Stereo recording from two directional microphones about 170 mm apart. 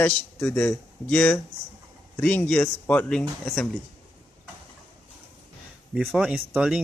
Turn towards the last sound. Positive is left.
turn(degrees=-5)  # may be behind; listen again after turning